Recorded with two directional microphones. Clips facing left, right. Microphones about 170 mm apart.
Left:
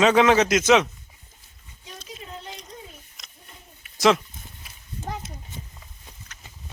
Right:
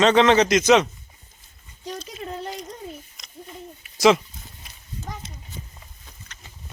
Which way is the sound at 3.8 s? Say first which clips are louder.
Right 2 dB; centre (ahead or behind).